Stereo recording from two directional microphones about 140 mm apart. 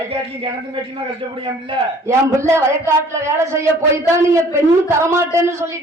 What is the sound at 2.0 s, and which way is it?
A man's voice, 20° right (ahead or behind).